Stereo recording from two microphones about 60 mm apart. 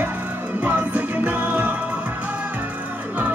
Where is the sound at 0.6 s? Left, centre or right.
Right.